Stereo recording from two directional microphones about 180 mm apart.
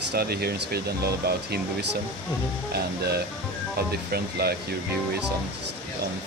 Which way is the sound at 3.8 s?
60° right (ahead or behind).